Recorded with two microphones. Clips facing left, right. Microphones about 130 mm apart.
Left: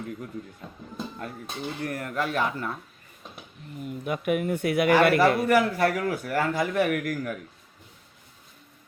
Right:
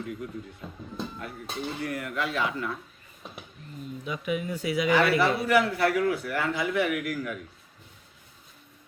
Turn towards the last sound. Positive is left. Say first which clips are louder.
# left 2 dB
turn(degrees=45)  # may be behind; listen again after turning